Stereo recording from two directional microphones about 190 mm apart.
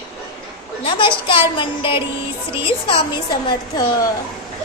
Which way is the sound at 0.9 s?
25° left (ahead or behind).